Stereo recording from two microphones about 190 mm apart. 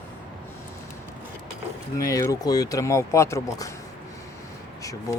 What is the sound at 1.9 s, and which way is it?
Speech, 15° left (ahead or behind).